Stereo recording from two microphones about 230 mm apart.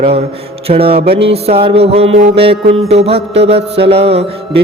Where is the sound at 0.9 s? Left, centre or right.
Right.